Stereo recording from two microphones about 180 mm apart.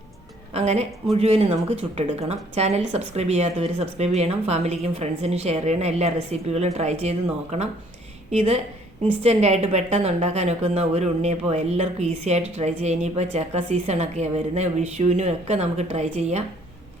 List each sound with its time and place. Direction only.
0.5 s a woman's voice: 40° right (ahead or behind)